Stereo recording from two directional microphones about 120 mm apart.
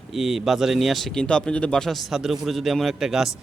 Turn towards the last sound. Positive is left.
turn(degrees=-5)  # may be behind; listen again after turning